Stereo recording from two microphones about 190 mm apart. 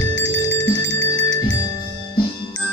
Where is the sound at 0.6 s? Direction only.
20° left (ahead or behind).